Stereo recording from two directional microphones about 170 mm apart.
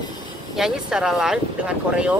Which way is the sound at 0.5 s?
5° right (ahead or behind).